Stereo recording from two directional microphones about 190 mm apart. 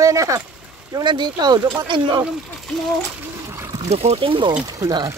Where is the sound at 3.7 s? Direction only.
35° right (ahead or behind); by 5.1 s 15° right (ahead or behind).